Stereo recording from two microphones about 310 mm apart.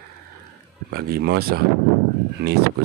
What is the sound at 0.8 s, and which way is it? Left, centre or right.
Speech, right.